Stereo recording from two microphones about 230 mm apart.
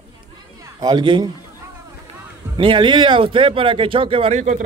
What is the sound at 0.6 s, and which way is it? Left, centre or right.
Speech, centre.